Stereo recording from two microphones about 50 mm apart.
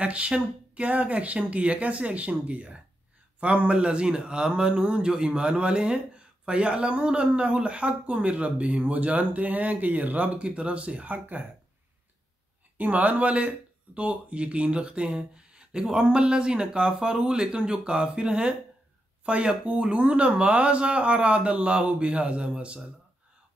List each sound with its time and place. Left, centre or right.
0.0 s speech: right
12.7 s speech: right; by 22.8 s centre